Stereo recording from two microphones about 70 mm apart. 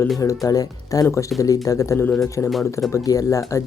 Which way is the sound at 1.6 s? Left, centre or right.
Left.